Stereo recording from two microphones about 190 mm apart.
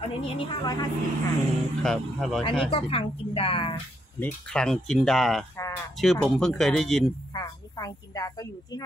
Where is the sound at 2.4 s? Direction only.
30° left (ahead or behind).